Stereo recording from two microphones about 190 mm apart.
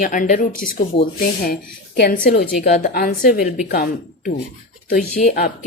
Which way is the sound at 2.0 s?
50° left (ahead or behind).